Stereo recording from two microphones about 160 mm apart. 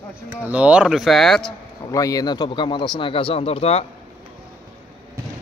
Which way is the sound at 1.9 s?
20° left (ahead or behind).